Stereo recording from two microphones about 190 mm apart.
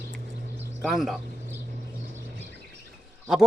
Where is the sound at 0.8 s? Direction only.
Centre (ahead or behind).